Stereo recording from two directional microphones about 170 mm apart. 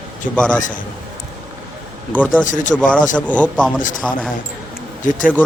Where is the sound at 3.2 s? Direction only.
10° left (ahead or behind).